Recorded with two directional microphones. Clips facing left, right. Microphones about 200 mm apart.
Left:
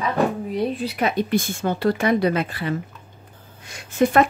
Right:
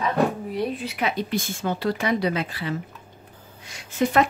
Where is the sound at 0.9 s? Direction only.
45° left (ahead or behind).